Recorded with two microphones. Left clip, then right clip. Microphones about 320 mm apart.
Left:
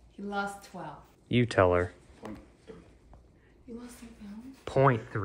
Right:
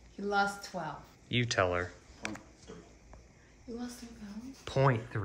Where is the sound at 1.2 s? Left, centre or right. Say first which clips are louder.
Left 5 dB; centre.